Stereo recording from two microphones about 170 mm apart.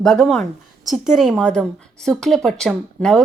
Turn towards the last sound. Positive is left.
turn(degrees=5)  # may be behind; listen again after turning